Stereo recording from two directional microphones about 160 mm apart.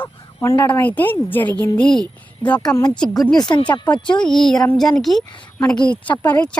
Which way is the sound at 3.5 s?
30° left (ahead or behind).